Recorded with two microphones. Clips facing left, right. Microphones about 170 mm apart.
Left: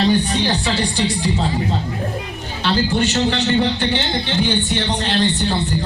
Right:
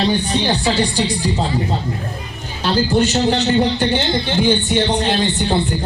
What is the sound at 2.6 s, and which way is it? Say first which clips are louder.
Speech: right 2 dB; 40° right (ahead or behind).